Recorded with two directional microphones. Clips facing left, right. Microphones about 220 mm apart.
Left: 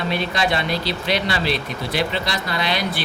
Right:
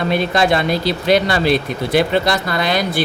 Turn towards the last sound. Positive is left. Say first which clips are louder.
# right 6 dB
turn(degrees=-45)  # may be behind; listen again after turning